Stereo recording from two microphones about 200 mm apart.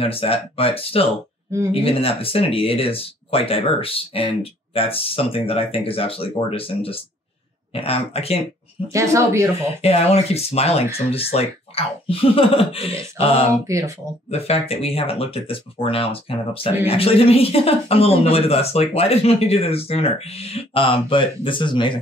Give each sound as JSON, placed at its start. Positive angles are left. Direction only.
{"t": 0.0, "sound": "speech", "side_deg": 30}
{"t": 8.9, "sound": "speech", "side_deg": -15}
{"t": 9.8, "sound": "speech", "side_deg": 30}
{"t": 13.5, "sound": "speech", "side_deg": -15}
{"t": 14.3, "sound": "speech", "side_deg": 30}